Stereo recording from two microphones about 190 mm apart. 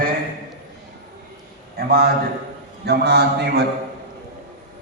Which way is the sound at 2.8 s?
60° right (ahead or behind).